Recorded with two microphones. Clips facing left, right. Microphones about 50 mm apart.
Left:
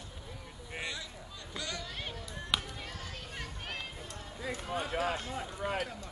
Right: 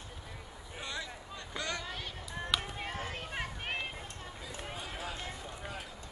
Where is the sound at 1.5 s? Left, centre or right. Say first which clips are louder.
Right 2 dB; right.